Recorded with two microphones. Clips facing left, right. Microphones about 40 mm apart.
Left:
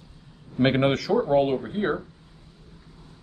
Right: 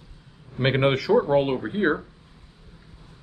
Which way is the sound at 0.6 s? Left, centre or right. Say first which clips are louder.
Even; centre.